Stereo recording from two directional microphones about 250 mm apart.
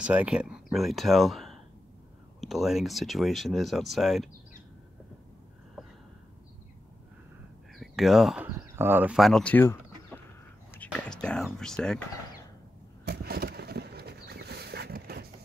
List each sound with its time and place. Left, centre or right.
0.0 s speech: centre
7.7 s speech: centre
13.0 s a sound: right